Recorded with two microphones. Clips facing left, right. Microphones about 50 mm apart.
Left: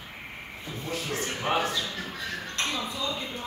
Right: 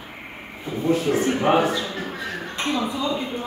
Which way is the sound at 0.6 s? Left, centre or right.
Centre.